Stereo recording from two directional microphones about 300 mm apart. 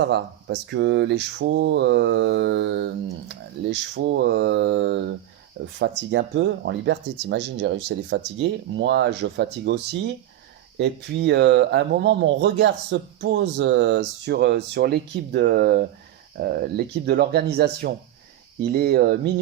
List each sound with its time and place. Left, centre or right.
0.0 s speech: right